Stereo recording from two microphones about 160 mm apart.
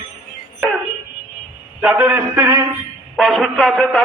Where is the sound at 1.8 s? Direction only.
10° right (ahead or behind).